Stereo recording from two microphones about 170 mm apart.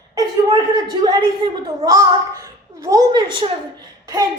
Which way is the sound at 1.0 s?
25° right (ahead or behind).